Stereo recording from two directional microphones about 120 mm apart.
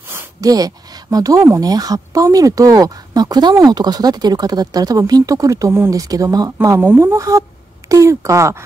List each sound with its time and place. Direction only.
0.4 s speech: 30° right (ahead or behind)